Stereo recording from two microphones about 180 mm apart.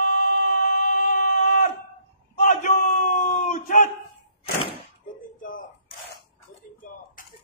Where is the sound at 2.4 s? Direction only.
45° left (ahead or behind).